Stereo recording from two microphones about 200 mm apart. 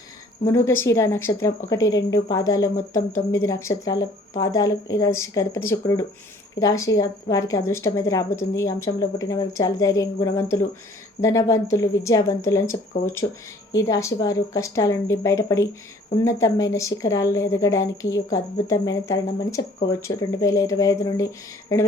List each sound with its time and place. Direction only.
0.4 s a woman's voice: 15° left (ahead or behind)